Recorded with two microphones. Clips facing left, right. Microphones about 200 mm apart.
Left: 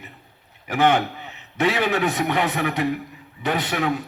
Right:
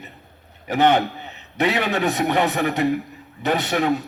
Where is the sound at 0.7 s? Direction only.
35° right (ahead or behind).